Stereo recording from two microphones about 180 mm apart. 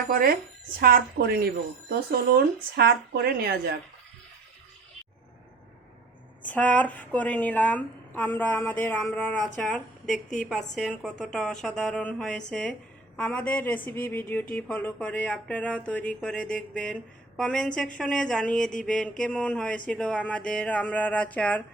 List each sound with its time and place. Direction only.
0.1 s speech: 55° right (ahead or behind)
6.4 s a woman's voice: 10° left (ahead or behind)